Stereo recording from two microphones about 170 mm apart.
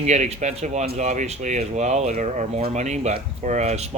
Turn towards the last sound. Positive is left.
turn(degrees=-40)  # may be behind; listen again after turning